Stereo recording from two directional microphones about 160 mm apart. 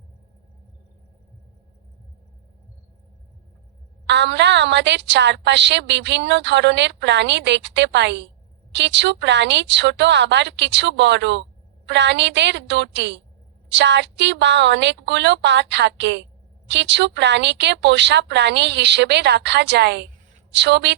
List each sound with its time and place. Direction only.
4.0 s a woman's voice: 90° right